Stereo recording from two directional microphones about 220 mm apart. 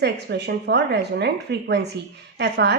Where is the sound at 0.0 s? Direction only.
50° right (ahead or behind).